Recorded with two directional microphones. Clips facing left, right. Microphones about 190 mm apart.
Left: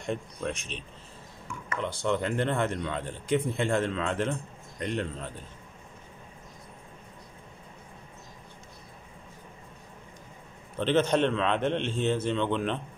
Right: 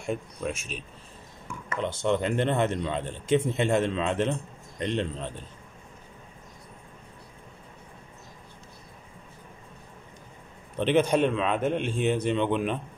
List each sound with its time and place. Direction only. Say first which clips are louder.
0.0 s a man's voice: right 1 dB; 5° right (ahead or behind)
1.8 s speech: right 3 dB; 20° right (ahead or behind)
10.8 s a man's voice: right 2 dB; 15° right (ahead or behind)